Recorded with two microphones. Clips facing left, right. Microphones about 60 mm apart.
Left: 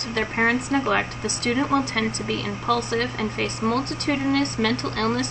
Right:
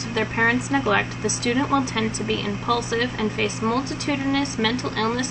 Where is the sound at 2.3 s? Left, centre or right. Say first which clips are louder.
Even; left.